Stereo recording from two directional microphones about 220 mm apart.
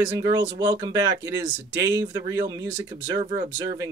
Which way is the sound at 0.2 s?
20° right (ahead or behind).